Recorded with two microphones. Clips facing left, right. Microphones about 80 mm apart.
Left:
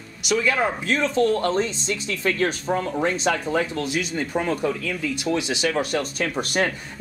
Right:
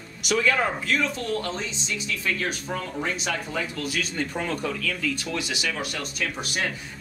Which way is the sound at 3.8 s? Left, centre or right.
Centre.